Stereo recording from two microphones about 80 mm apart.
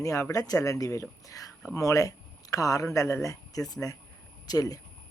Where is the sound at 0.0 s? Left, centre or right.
Left.